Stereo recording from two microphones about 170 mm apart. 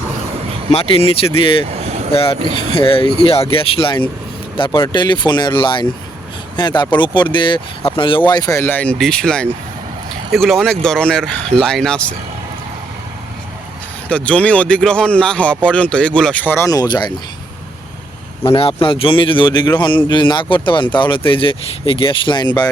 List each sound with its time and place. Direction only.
0.7 s speech: 35° left (ahead or behind)
1.7 s vehicle: 40° right (ahead or behind)
2.1 s speech: 35° left (ahead or behind); by 12.0 s 5° left (ahead or behind)
14.1 s speech: 10° left (ahead or behind); by 17.1 s 25° left (ahead or behind)
18.4 s speech: 35° left (ahead or behind)